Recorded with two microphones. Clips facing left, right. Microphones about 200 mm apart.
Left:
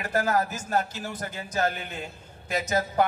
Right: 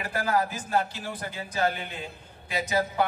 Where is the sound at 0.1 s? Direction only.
45° left (ahead or behind).